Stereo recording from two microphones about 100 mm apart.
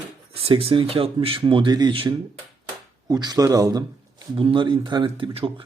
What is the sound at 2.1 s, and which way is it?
Speech, 35° right (ahead or behind).